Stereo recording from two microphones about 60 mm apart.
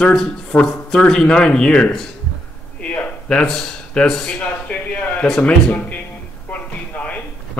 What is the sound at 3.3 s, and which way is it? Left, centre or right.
Speech, centre.